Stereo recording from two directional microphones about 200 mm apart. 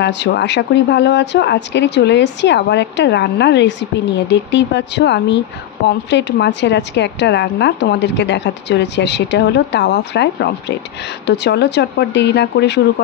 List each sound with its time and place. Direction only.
0.0 s speech: 60° left (ahead or behind)